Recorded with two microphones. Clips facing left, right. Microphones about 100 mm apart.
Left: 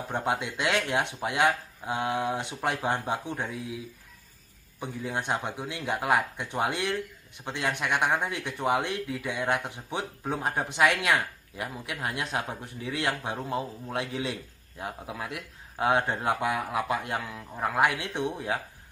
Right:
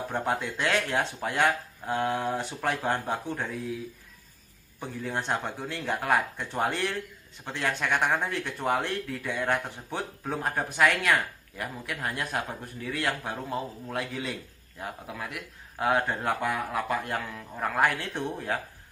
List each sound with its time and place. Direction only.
0.1 s speech: 15° left (ahead or behind)
4.7 s a man's voice: 10° left (ahead or behind)